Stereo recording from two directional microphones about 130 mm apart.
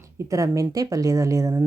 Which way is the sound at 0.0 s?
25° right (ahead or behind).